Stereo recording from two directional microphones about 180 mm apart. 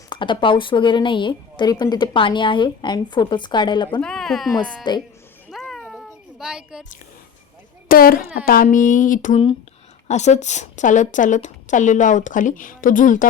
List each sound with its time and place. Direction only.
0.1 s speech: 25° left (ahead or behind)
4.0 s speech: 5° left (ahead or behind)
4.8 s speech: 25° left (ahead or behind)
5.5 s a sound: centre (ahead or behind)
7.9 s a woman's voice: 55° left (ahead or behind)